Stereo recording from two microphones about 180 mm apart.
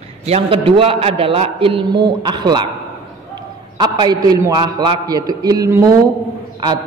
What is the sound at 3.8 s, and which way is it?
A man's voice, 25° right (ahead or behind).